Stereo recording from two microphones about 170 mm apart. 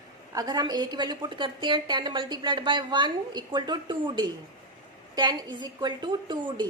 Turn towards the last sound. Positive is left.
turn(degrees=-25)  # may be behind; listen again after turning